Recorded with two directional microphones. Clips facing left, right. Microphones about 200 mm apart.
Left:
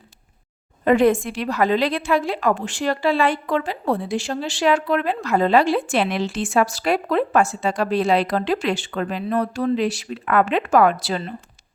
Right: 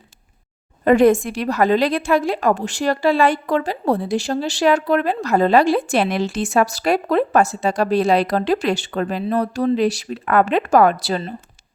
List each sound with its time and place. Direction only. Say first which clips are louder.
0.9 s a woman's voice: right 3 dB; 45° right (ahead or behind)